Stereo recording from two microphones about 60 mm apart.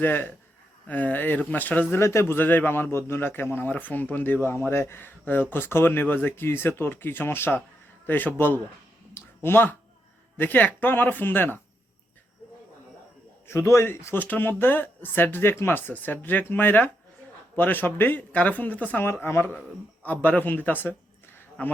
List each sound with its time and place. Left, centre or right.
0.0 s a man's voice: left
1.9 s a man's voice: left
9.1 s a sound: left
10.3 s a man's voice: left
13.5 s a man's voice: left
14.2 s a man's voice: left
19.0 s a man's voice: left
19.5 s speech: left